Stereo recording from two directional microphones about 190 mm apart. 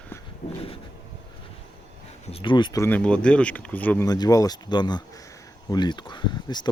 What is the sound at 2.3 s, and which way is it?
Speech, 25° left (ahead or behind).